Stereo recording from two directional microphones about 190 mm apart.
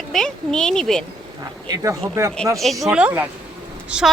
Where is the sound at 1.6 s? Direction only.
20° right (ahead or behind).